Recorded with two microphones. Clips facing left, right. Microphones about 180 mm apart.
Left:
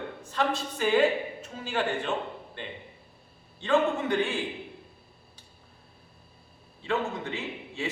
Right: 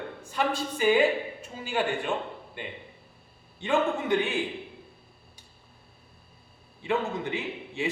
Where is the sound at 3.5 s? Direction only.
15° right (ahead or behind).